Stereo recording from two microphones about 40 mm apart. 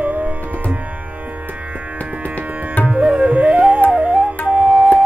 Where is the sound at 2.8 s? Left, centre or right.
Right.